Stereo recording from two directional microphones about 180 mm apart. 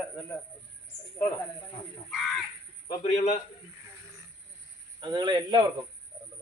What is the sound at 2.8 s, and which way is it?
Speech, 35° left (ahead or behind).